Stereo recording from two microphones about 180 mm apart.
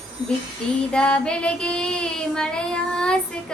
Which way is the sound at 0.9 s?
5° left (ahead or behind).